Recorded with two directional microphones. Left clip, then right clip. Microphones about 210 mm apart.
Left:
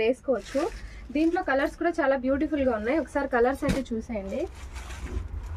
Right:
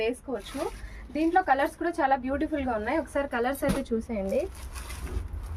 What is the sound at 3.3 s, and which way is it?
Speech, 35° right (ahead or behind).